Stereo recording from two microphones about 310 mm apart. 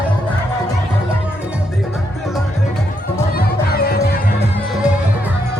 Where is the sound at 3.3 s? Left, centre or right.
Left.